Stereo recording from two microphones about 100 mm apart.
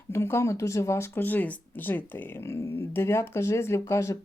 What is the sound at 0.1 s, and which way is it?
Speech, 25° left (ahead or behind).